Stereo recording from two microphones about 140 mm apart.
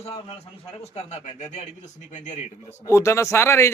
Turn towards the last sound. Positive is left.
turn(degrees=20)  # may be behind; listen again after turning